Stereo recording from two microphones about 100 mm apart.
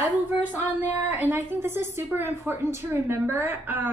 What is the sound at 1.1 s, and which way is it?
A woman's voice, 20° right (ahead or behind).